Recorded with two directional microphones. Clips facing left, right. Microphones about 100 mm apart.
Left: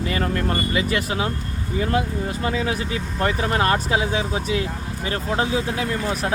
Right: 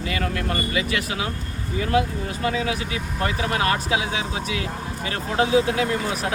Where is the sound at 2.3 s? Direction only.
35° left (ahead or behind).